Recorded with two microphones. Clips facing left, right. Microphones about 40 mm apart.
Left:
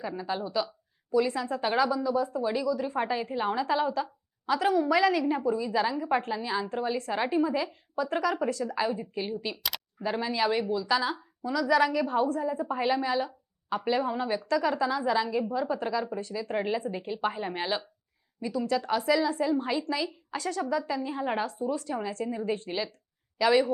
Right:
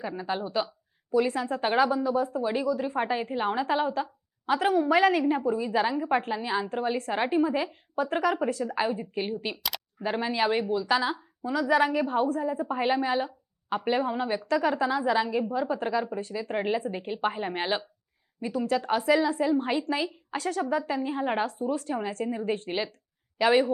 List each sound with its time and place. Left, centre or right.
0.2 s a woman's voice: right
2.4 s a woman's voice: right